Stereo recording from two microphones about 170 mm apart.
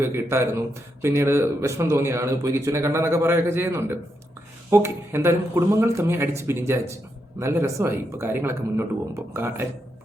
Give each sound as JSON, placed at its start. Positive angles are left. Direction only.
{"t": 0.0, "sound": "speech", "side_deg": -15}